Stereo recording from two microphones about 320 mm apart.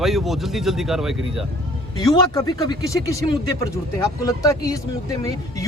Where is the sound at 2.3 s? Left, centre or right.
Centre.